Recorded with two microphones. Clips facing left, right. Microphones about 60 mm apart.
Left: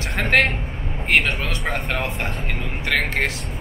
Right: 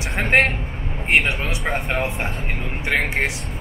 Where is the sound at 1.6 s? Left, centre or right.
Centre.